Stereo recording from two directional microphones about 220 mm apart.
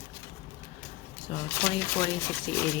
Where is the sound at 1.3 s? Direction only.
25° left (ahead or behind).